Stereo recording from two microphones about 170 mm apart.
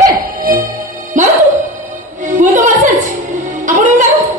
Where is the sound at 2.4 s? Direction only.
50° right (ahead or behind).